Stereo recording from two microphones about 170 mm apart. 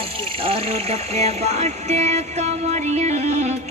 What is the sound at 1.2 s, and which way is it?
Music, 40° right (ahead or behind).